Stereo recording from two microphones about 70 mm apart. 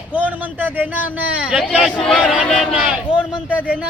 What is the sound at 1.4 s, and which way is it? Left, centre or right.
Speech, centre.